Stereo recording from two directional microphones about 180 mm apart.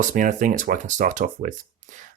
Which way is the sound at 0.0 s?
45° right (ahead or behind).